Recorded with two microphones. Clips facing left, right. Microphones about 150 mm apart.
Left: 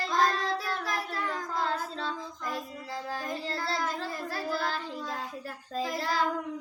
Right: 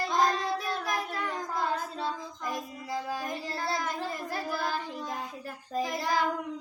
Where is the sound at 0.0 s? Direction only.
20° right (ahead or behind).